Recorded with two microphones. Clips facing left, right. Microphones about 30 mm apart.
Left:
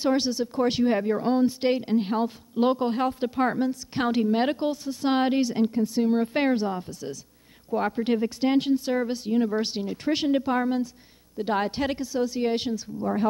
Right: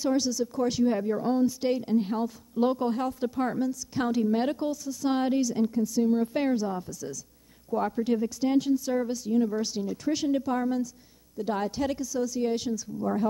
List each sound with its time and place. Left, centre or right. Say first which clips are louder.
0.0 s speech: left 2 dB; left